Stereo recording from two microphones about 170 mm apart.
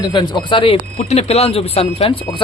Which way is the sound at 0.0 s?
25° left (ahead or behind).